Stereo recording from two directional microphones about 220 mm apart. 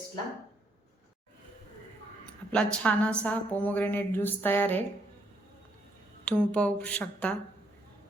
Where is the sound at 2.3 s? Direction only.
5° left (ahead or behind).